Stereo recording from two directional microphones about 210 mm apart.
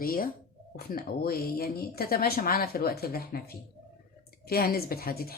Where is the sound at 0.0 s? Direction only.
45° left (ahead or behind).